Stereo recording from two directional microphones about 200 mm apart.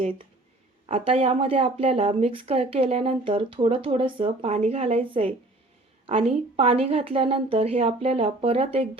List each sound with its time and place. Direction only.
0.9 s speech: 30° right (ahead or behind)